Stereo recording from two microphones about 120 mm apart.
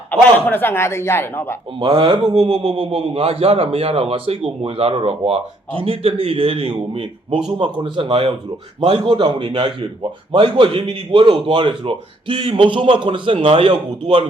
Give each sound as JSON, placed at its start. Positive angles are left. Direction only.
{"t": 0.1, "sound": "speech", "side_deg": 15}
{"t": 1.8, "sound": "a man's voice", "side_deg": -45}